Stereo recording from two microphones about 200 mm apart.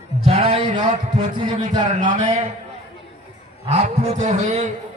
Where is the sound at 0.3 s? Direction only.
30° right (ahead or behind).